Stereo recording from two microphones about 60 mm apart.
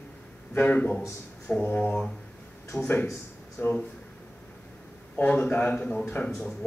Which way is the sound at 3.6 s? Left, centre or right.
Left.